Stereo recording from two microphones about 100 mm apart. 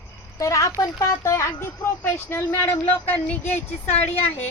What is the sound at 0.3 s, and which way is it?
A woman's voice, 30° left (ahead or behind).